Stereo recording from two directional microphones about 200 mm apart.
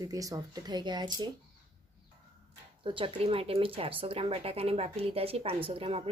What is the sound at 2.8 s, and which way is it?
Speech, 25° right (ahead or behind).